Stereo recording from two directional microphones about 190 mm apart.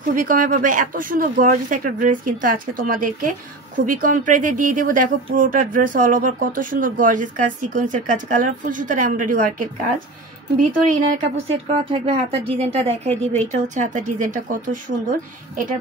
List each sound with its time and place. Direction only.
0.1 s speech: 45° right (ahead or behind)
11.4 s speech: 30° right (ahead or behind)